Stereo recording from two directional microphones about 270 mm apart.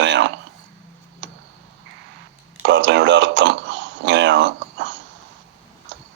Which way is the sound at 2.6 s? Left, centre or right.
Right.